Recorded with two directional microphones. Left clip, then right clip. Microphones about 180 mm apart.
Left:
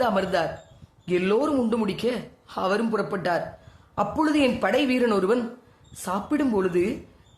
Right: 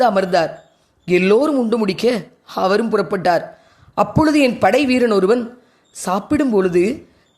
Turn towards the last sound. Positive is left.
turn(degrees=-30)  # may be behind; listen again after turning